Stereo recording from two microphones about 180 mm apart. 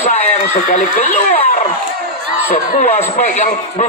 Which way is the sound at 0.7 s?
40° left (ahead or behind).